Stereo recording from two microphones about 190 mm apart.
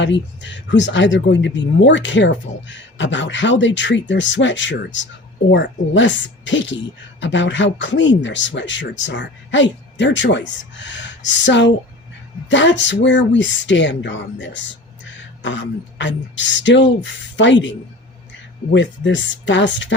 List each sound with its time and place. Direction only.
0.0 s speech: 70° left (ahead or behind)